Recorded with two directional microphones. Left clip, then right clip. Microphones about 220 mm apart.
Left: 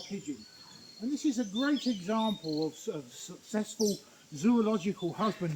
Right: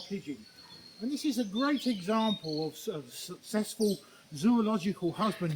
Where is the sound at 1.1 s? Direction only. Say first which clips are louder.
Left 1 dB; 30° right (ahead or behind).